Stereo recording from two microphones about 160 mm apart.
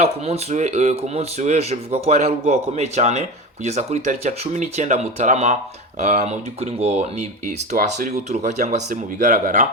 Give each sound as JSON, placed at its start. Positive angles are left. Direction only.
{"t": 0.0, "sound": "speech", "side_deg": -40}